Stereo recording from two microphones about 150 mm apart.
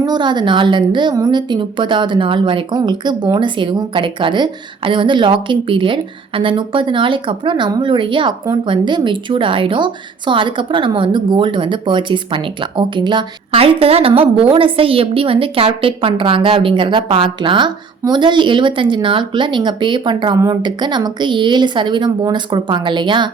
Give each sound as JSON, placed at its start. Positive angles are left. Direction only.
{"t": 0.0, "sound": "speech", "side_deg": -30}